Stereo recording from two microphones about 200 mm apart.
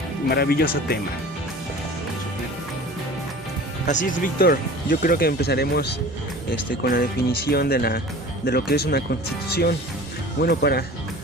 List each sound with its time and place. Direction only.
0.3 s speech: 50° left (ahead or behind)
4.0 s speech: 45° left (ahead or behind)